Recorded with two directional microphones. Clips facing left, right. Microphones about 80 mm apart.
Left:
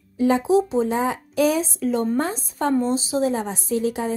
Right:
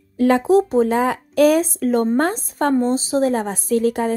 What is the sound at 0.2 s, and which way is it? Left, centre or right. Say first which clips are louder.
A woman's voice: right 3 dB; right.